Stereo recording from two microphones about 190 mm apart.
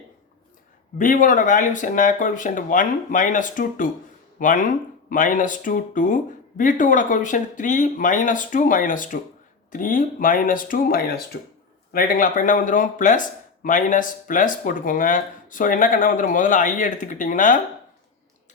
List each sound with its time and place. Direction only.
0.9 s speech: 45° left (ahead or behind)